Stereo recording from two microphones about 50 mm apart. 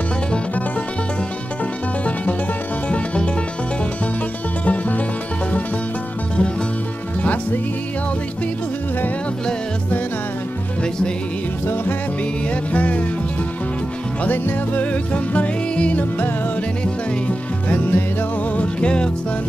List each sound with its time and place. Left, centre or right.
4.6 s music: left
12.7 s music: left
14.2 s music: left